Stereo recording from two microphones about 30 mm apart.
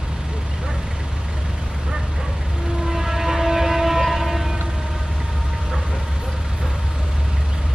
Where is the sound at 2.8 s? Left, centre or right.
Centre.